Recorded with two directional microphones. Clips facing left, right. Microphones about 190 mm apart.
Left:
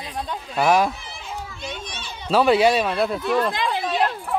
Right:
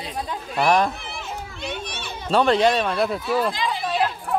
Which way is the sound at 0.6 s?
5° left (ahead or behind).